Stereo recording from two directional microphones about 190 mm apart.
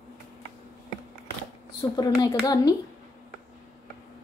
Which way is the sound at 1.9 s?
20° left (ahead or behind).